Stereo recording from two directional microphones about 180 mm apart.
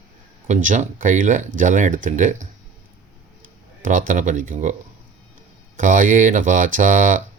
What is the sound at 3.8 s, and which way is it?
Speech, 45° right (ahead or behind).